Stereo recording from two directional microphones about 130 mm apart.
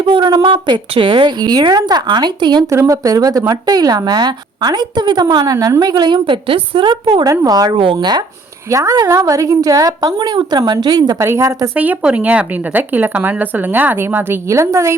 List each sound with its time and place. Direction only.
0.0 s speech: 40° right (ahead or behind)
2.6 s a woman's voice: 25° right (ahead or behind)
11.7 s speech: 10° right (ahead or behind)